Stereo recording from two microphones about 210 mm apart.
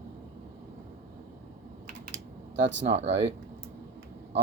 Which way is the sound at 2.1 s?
60° right (ahead or behind).